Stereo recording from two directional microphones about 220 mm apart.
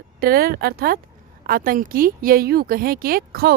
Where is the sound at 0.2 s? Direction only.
40° right (ahead or behind).